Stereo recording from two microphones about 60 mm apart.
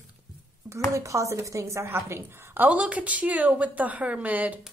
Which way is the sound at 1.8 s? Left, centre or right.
Right.